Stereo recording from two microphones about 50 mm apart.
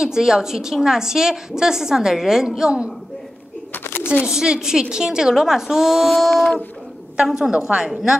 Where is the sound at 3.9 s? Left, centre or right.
Left.